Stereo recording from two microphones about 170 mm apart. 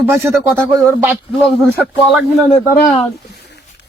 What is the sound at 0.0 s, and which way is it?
Speech, 15° right (ahead or behind).